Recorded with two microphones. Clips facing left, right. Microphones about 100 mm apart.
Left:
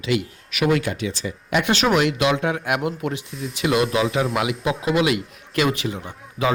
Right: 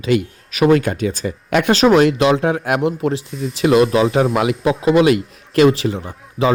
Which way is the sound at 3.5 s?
35° right (ahead or behind).